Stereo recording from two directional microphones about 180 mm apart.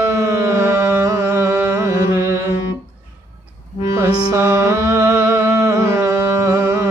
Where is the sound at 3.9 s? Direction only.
15° right (ahead or behind).